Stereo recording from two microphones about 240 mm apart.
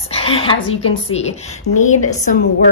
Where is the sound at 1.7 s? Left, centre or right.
Left.